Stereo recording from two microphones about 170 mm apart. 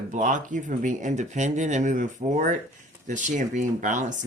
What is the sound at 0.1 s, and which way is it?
Speech, 45° right (ahead or behind).